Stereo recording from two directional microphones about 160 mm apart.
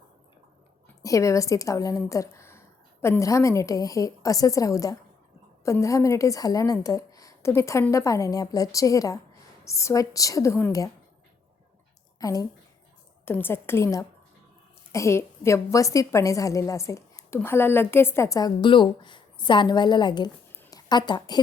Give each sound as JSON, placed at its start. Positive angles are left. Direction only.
{"t": 1.0, "sound": "a woman's voice", "side_deg": 20}
{"t": 12.2, "sound": "a woman's voice", "side_deg": 20}
{"t": 20.6, "sound": "a sound", "side_deg": 20}